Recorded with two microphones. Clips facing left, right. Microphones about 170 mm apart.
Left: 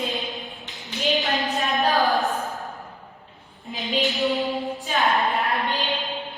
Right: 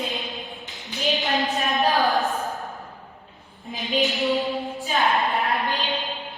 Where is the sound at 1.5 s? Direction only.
20° right (ahead or behind).